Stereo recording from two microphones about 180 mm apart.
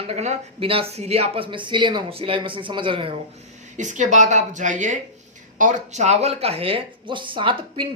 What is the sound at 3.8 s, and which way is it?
A man's voice, 45° right (ahead or behind).